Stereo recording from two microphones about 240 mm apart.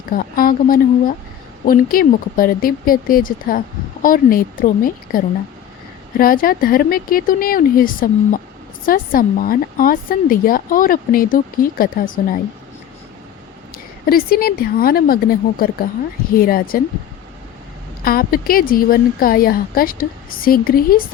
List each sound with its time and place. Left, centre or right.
0.1 s a woman's voice: left
14.1 s a woman's voice: left
18.0 s a woman's voice: left